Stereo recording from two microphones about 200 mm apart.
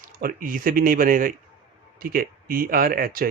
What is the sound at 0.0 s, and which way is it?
Speech, 45° right (ahead or behind).